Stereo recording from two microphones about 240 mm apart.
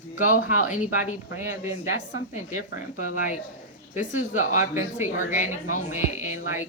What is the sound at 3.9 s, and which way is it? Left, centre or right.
Speech, left.